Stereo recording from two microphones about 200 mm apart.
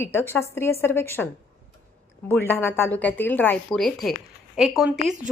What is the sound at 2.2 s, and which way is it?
A woman's voice, 10° left (ahead or behind).